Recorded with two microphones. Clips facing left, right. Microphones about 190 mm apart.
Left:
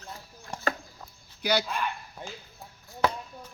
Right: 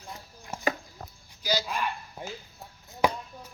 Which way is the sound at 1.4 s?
60° left (ahead or behind).